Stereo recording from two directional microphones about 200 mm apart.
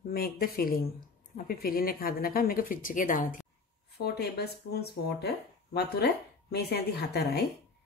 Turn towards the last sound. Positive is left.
turn(degrees=55)  # may be behind; listen again after turning